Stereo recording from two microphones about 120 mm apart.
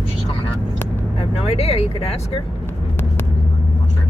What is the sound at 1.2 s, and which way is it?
Speech, 60° left (ahead or behind).